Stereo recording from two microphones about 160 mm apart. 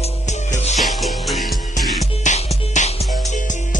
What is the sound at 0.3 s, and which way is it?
Music, 45° left (ahead or behind).